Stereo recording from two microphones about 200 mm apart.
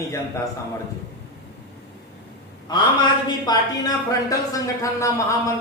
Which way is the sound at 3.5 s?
20° left (ahead or behind).